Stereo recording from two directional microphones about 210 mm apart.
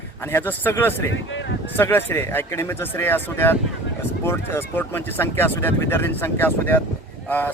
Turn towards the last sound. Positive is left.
turn(degrees=10)  # may be behind; listen again after turning